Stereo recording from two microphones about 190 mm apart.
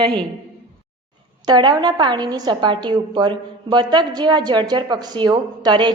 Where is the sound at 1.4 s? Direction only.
20° right (ahead or behind).